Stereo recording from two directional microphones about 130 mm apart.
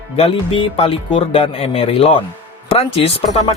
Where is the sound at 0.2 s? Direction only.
45° left (ahead or behind).